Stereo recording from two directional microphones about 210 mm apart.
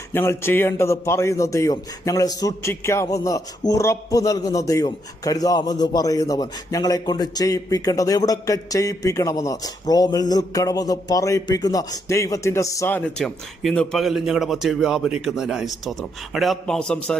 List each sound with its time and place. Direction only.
0.1 s a man's voice: 10° left (ahead or behind)